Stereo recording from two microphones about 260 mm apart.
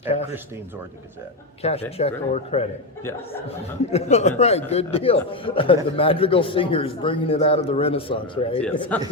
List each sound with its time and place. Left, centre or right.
1.6 s a man's voice: left
3.9 s a man's voice: left
8.9 s a man's voice: centre